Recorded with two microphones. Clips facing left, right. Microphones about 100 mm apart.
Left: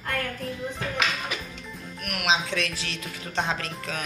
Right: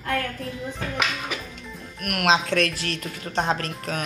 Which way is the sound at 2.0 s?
60° right (ahead or behind).